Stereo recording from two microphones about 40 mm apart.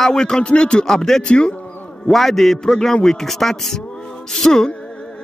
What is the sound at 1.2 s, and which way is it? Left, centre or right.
Speech, left.